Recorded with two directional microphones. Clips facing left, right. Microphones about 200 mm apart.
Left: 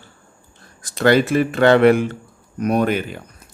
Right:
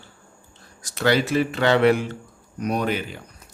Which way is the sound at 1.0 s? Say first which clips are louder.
Left 5 dB; 55° left (ahead or behind).